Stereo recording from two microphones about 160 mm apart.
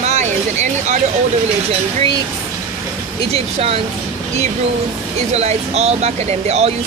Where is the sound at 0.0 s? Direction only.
45° right (ahead or behind).